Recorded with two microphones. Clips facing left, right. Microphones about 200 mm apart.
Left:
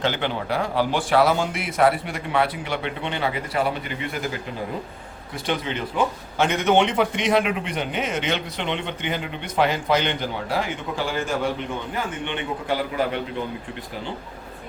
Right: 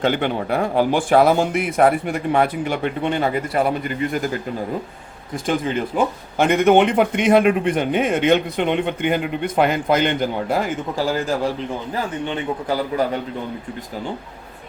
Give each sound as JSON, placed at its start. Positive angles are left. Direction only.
{"t": 0.0, "sound": "a man's voice", "side_deg": -50}
{"t": 5.5, "sound": "a man's voice", "side_deg": -45}